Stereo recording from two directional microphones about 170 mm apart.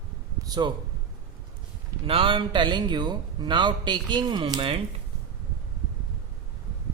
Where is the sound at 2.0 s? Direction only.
30° right (ahead or behind).